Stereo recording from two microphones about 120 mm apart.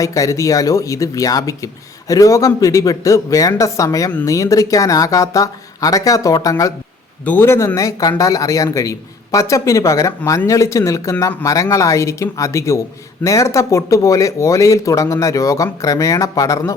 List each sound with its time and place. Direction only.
0.0 s a man's voice: 25° left (ahead or behind)